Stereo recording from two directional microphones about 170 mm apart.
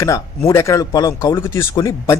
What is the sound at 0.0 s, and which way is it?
A man's voice, 20° left (ahead or behind).